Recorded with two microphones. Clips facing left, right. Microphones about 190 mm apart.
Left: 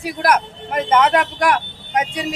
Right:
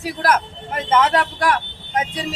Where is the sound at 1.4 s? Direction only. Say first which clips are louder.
Left 2 dB; 15° left (ahead or behind).